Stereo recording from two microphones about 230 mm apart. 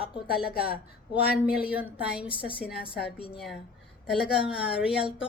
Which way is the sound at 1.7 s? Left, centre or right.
Centre.